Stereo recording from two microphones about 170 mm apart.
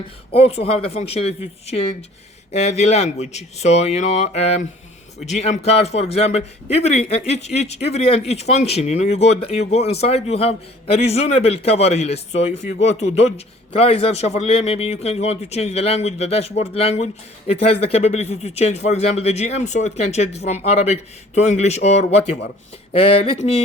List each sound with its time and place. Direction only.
0.3 s a man's voice: 35° left (ahead or behind)